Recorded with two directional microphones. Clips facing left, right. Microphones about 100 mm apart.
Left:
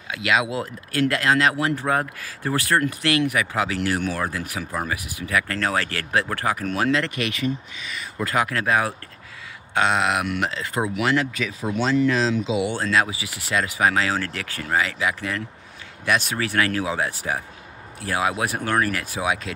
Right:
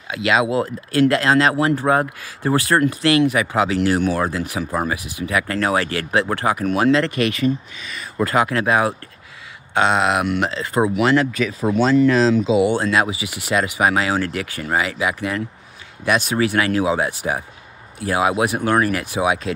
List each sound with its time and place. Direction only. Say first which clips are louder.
0.1 s speech: right 5 dB; 30° right (ahead or behind)
6.9 s speech: right 6 dB; 35° right (ahead or behind)
8.5 s speech: right 4 dB; 20° right (ahead or behind); by 12.7 s 40° right (ahead or behind)
12.7 s speech: right 3 dB; 20° right (ahead or behind)